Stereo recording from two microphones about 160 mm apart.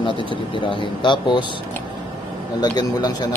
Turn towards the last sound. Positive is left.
turn(degrees=25)  # may be behind; listen again after turning